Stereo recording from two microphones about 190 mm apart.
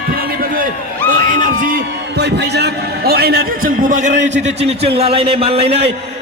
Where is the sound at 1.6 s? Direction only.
55° right (ahead or behind).